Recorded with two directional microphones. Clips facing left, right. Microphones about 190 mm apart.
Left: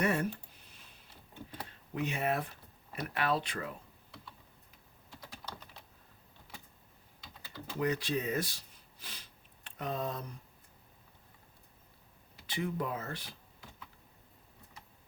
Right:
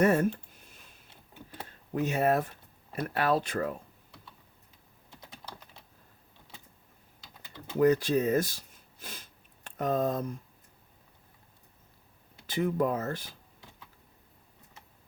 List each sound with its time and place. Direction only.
0.0 s speech: 45° right (ahead or behind)
1.9 s speech: 45° right (ahead or behind)
7.8 s speech: 45° right (ahead or behind)
12.5 s speech: 45° right (ahead or behind)